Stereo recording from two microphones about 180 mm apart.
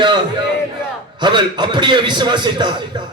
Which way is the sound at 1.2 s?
25° right (ahead or behind).